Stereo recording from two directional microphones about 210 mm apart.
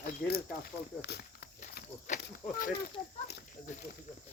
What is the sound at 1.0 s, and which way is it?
Snake, 50° left (ahead or behind).